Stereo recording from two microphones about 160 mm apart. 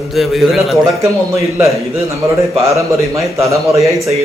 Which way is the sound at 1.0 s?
20° right (ahead or behind).